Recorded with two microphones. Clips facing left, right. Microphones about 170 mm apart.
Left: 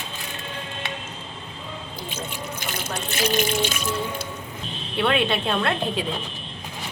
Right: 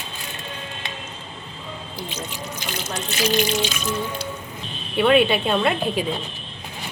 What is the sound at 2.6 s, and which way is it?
Water tap, 55° left (ahead or behind).